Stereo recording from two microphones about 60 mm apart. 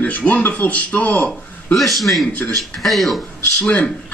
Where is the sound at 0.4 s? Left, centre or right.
Left.